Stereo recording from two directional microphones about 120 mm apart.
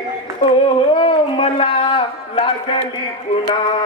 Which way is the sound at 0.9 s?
50° left (ahead or behind).